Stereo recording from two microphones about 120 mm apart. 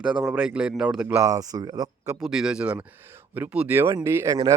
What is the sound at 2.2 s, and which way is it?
A man's voice, 5° right (ahead or behind).